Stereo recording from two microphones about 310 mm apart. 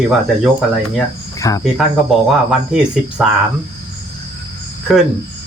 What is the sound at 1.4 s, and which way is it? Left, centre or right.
Cricket, centre.